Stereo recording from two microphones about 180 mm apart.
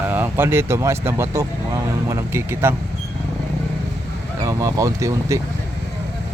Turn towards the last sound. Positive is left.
turn(degrees=-15)  # may be behind; listen again after turning